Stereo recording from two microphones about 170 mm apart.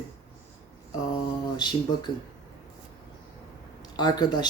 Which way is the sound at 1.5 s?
25° left (ahead or behind).